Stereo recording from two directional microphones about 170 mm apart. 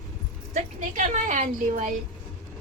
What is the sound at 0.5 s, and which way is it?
A woman's voice, 50° right (ahead or behind).